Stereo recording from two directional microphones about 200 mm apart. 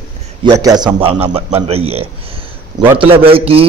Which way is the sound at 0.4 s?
20° right (ahead or behind).